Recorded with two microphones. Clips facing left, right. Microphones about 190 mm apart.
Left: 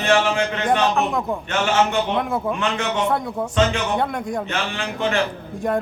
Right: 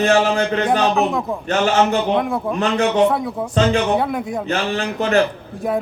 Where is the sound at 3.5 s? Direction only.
35° right (ahead or behind).